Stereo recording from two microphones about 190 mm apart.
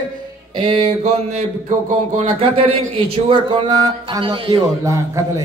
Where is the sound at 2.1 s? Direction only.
30° right (ahead or behind).